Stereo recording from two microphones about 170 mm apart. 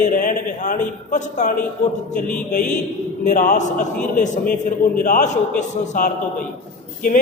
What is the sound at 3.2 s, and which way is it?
A man's voice, 45° left (ahead or behind).